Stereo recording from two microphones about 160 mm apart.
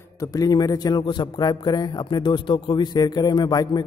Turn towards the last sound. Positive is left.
turn(degrees=25)  # may be behind; listen again after turning